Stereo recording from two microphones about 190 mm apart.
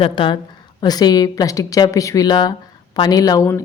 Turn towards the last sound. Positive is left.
turn(degrees=15)  # may be behind; listen again after turning